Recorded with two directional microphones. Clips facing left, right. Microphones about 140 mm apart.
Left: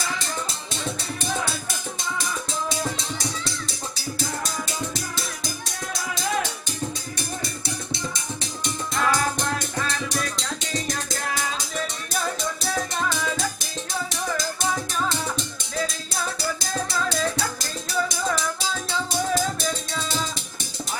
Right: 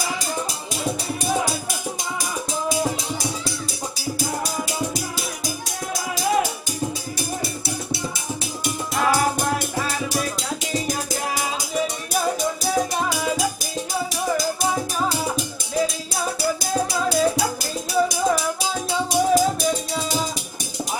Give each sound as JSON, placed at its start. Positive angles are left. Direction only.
{"t": 0.0, "sound": "music", "side_deg": -15}
{"t": 2.5, "sound": "music", "side_deg": -10}
{"t": 4.9, "sound": "music", "side_deg": -10}
{"t": 15.1, "sound": "music", "side_deg": -10}